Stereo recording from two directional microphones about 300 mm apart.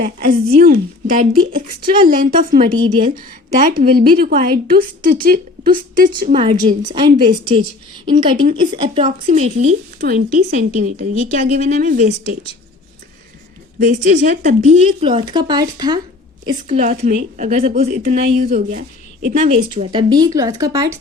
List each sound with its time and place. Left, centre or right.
0.0 s speech: right
3.7 s speech: right
13.7 s speech: right
16.5 s speech: right
19.7 s speech: centre